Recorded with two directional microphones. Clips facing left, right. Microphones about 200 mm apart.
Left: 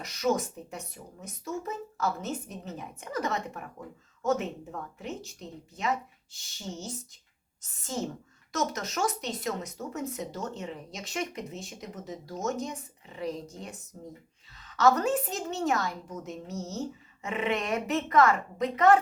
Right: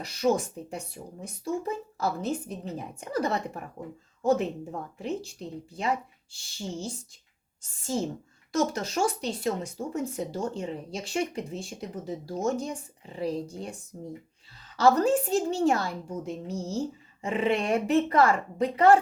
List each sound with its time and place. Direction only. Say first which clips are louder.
0.0 s speech: right 3 dB; 30° right (ahead or behind)
8.5 s speech: right 4 dB; 30° right (ahead or behind)